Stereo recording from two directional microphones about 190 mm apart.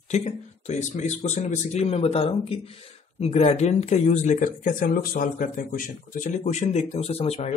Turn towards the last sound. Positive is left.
turn(degrees=35)  # may be behind; listen again after turning